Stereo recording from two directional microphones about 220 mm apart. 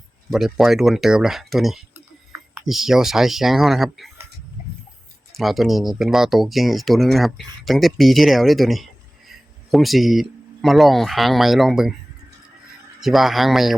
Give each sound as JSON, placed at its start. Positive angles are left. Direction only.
{"t": 0.3, "sound": "speech", "side_deg": 0}
{"t": 5.3, "sound": "speech", "side_deg": 0}
{"t": 13.0, "sound": "speech", "side_deg": 0}